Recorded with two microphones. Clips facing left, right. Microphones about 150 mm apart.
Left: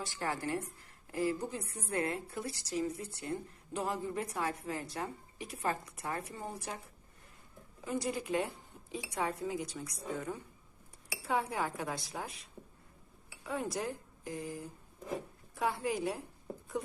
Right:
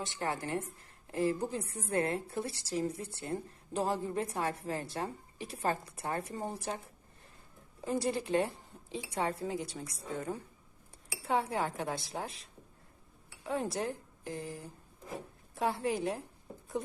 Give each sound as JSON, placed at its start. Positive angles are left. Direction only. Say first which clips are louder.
{"t": 0.0, "sound": "speech", "louder": "right 1 dB", "side_deg": -20}
{"t": 7.9, "sound": "a woman's voice", "louder": "right 3 dB", "side_deg": -30}
{"t": 11.3, "sound": "speech", "louder": "right 2 dB", "side_deg": -25}
{"t": 13.4, "sound": "speech", "louder": "right 2 dB", "side_deg": -30}
{"t": 15.5, "sound": "speech", "louder": "right 2 dB", "side_deg": -25}